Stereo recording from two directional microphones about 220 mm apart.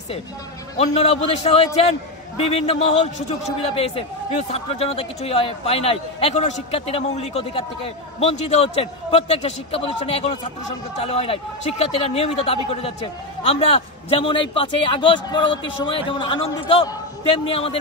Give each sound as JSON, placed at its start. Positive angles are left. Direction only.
{"t": 0.7, "sound": "a man's voice", "side_deg": 30}